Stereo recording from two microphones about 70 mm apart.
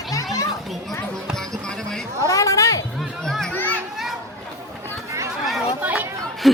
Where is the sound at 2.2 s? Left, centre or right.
Left.